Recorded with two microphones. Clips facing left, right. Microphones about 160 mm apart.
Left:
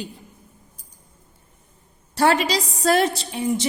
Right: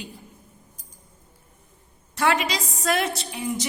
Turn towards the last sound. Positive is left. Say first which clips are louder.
# left 5 dB
turn(degrees=30)  # may be behind; listen again after turning